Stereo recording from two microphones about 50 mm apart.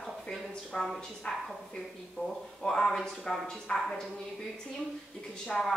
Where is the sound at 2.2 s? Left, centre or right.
Left.